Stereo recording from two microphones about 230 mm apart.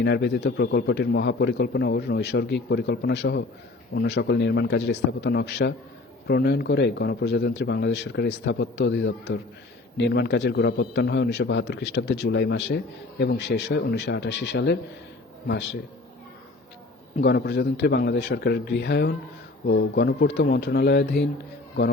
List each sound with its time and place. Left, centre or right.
0.0 s a man's voice: left
17.2 s a man's voice: left